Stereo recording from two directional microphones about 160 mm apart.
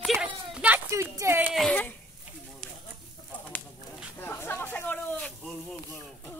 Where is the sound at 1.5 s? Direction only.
5° left (ahead or behind).